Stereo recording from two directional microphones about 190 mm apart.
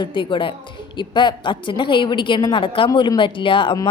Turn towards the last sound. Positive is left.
turn(degrees=25)  # may be behind; listen again after turning